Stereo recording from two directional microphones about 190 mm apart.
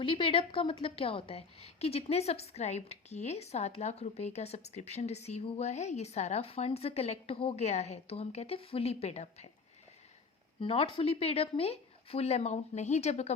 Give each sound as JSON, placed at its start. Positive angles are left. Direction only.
{"t": 0.0, "sound": "a woman's voice", "side_deg": 30}
{"t": 10.6, "sound": "a woman's voice", "side_deg": 30}